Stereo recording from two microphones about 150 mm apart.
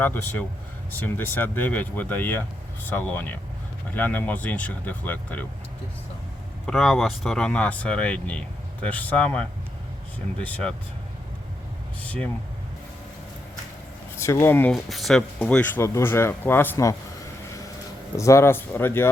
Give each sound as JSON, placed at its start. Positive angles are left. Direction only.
{"t": 0.0, "sound": "speech", "side_deg": 15}
{"t": 6.7, "sound": "speech", "side_deg": 0}
{"t": 12.0, "sound": "speech", "side_deg": 10}
{"t": 14.2, "sound": "speech", "side_deg": 15}
{"t": 14.7, "sound": "speech", "side_deg": 0}
{"t": 18.2, "sound": "speech", "side_deg": 20}